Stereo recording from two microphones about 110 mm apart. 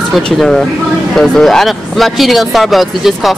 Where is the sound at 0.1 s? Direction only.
Centre (ahead or behind).